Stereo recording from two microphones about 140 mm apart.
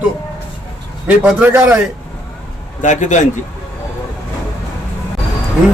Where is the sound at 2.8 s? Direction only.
60° left (ahead or behind).